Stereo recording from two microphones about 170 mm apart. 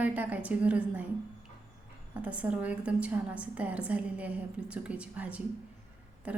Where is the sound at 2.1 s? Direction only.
10° right (ahead or behind).